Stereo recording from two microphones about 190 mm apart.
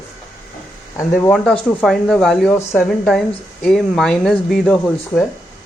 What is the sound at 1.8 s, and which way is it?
Speech, centre (ahead or behind).